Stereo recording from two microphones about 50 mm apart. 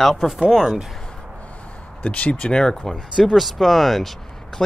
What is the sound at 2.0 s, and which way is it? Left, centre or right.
Speech, left.